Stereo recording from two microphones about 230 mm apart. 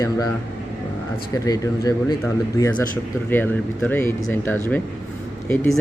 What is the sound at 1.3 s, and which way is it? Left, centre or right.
Speech, centre.